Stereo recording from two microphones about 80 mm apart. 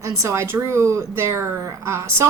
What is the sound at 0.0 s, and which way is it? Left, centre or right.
A woman's voice, right.